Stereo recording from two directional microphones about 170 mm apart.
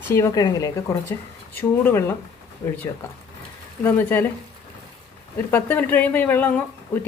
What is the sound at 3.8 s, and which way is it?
Speech, 10° left (ahead or behind).